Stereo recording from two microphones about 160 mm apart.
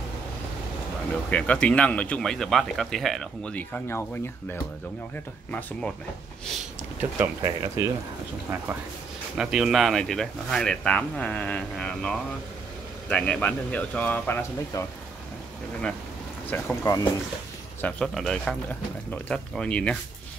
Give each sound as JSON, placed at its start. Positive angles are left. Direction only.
{"t": 1.3, "sound": "speech", "side_deg": 5}
{"t": 5.5, "sound": "speech", "side_deg": 10}
{"t": 7.0, "sound": "speech", "side_deg": -15}
{"t": 9.4, "sound": "speech", "side_deg": -5}
{"t": 16.4, "sound": "speech", "side_deg": 10}
{"t": 16.8, "sound": "speech", "side_deg": 20}
{"t": 17.8, "sound": "speech", "side_deg": 5}